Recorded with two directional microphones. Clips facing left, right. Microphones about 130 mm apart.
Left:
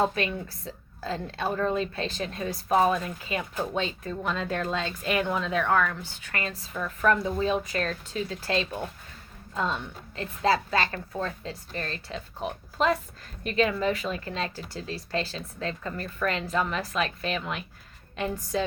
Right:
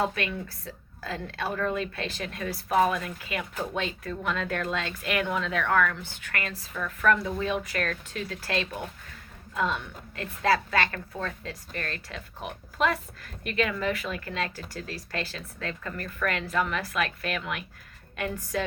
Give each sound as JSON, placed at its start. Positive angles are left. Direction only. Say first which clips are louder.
{"t": 0.0, "sound": "a woman's voice", "louder": "left 2 dB", "side_deg": 30}